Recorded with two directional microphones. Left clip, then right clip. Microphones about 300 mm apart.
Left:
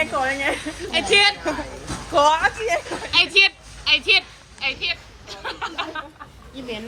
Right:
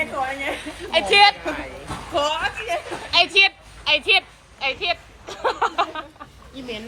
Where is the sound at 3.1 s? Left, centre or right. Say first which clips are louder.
Even; centre.